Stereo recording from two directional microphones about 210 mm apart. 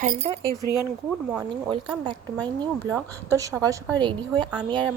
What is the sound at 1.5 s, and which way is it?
A woman's voice, 20° right (ahead or behind).